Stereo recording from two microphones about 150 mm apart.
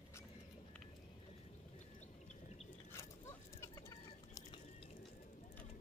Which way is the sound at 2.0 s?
50° left (ahead or behind).